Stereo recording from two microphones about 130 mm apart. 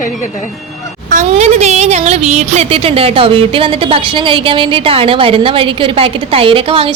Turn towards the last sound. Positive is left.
turn(degrees=-45)  # may be behind; listen again after turning